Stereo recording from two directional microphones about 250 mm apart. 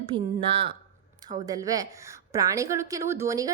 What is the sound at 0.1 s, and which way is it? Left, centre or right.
A woman's voice, centre.